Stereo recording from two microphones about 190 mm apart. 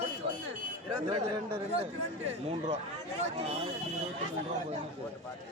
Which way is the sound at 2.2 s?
35° right (ahead or behind).